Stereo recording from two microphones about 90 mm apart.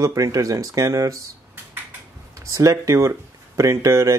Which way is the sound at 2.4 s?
35° right (ahead or behind).